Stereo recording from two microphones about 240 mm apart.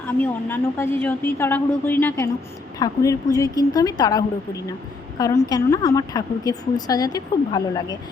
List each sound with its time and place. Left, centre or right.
0.1 s a woman's voice: centre